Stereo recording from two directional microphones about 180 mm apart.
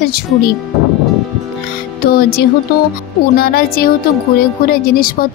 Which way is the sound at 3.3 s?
55° left (ahead or behind).